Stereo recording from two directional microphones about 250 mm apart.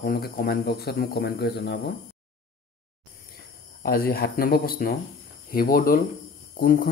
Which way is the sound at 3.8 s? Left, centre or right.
Left.